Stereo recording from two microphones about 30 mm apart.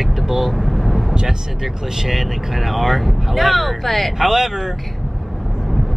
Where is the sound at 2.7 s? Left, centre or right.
Centre.